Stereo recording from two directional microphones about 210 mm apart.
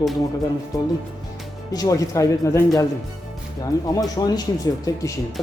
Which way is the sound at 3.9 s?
20° left (ahead or behind).